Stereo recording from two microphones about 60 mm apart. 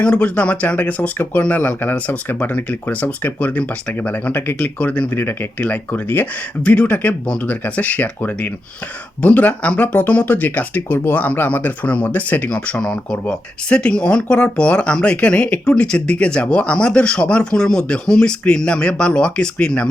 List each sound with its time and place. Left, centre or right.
0.0 s speech: centre
4.1 s speech: left
5.1 s speech: left
5.6 s speech: left